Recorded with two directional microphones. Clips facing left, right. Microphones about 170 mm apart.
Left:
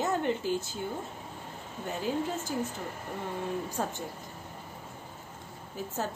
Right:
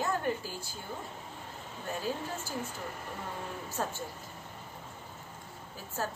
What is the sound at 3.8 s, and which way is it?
Speech, 15° left (ahead or behind).